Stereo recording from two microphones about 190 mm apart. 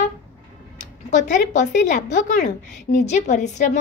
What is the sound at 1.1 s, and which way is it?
A woman's voice, 40° left (ahead or behind).